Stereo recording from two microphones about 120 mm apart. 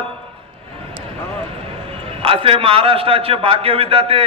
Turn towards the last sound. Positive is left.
turn(degrees=-50)  # may be behind; listen again after turning